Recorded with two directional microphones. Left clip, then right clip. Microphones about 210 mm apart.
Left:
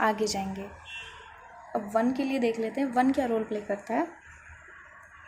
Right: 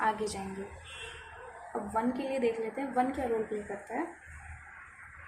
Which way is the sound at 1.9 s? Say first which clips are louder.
Left 4 dB; 50° left (ahead or behind).